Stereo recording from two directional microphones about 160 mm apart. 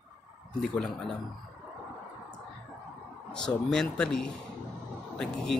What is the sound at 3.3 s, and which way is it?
Speech, 5° left (ahead or behind).